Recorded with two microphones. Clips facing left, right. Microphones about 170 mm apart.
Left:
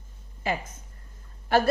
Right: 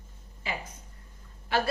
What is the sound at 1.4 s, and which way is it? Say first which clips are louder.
Speech: left 6 dB; 45° left (ahead or behind).